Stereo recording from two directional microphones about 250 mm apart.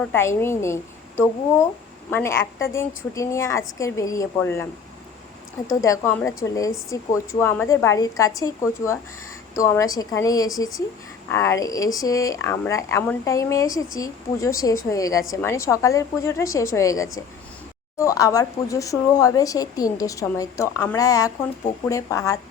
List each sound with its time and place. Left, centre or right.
0.0 s speech: centre
2.0 s speech: centre
5.8 s speech: centre